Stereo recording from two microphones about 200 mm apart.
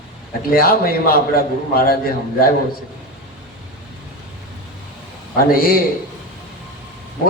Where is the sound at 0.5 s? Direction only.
45° left (ahead or behind).